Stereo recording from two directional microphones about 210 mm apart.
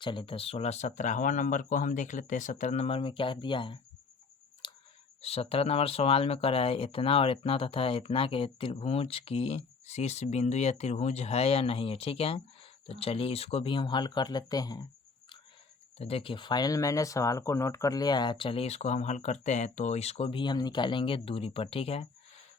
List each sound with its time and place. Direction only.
0.0 s speech: 25° left (ahead or behind)
4.6 s a sound: 20° left (ahead or behind)
5.2 s speech: 30° left (ahead or behind)
16.0 s speech: 30° left (ahead or behind)